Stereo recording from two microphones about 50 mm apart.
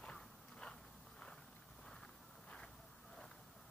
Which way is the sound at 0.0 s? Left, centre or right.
Centre.